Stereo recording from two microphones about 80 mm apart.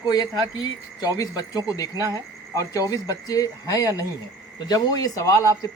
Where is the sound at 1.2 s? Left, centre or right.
Left.